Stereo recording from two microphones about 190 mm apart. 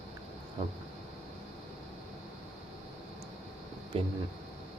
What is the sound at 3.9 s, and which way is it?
Speech, 30° right (ahead or behind).